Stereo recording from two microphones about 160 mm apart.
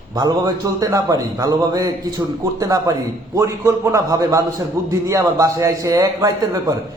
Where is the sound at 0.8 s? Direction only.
20° right (ahead or behind).